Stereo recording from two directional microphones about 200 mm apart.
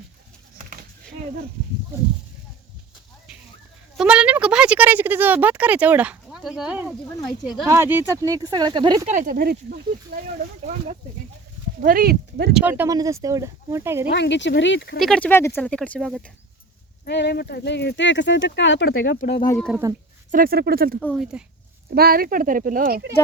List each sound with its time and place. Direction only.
3.9 s speech: 5° right (ahead or behind)
7.7 s speech: 10° right (ahead or behind)
9.0 s speech: 40° right (ahead or behind)
11.8 s speech: 45° right (ahead or behind)
12.5 s speech: 10° right (ahead or behind)
14.1 s speech: 60° left (ahead or behind)
14.9 s speech: 5° left (ahead or behind)
17.1 s speech: 55° left (ahead or behind)
19.7 s speech: 5° right (ahead or behind)
20.3 s speech: 50° right (ahead or behind)
21.0 s speech: centre (ahead or behind)
21.9 s speech: 50° right (ahead or behind)